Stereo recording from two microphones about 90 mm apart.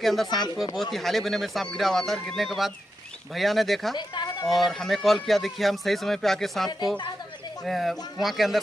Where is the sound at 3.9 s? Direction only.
50° left (ahead or behind).